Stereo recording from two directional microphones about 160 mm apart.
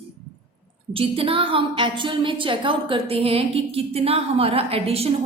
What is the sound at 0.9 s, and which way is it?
A woman's voice, 35° right (ahead or behind).